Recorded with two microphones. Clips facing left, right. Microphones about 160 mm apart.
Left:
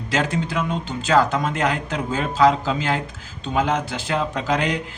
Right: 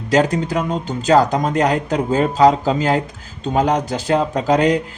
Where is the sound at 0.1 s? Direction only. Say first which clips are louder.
Right 7 dB; 40° right (ahead or behind).